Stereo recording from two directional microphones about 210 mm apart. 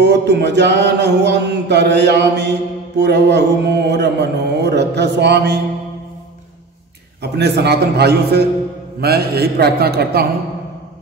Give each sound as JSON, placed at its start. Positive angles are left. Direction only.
{"t": 0.0, "sound": "speech", "side_deg": -55}
{"t": 7.2, "sound": "speech", "side_deg": -50}